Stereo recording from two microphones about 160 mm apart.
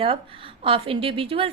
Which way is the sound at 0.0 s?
35° right (ahead or behind).